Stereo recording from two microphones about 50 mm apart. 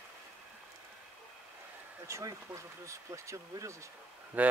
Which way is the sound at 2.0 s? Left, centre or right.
Right.